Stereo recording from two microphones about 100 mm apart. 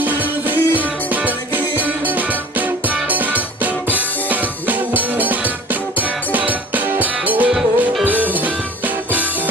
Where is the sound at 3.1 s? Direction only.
15° right (ahead or behind).